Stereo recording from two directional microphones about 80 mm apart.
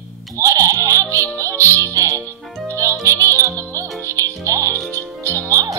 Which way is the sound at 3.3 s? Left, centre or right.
Right.